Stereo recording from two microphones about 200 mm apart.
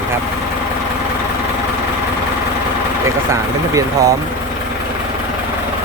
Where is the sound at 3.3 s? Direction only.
15° right (ahead or behind).